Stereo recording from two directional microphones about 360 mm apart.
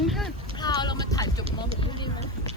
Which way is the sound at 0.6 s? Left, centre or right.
Centre.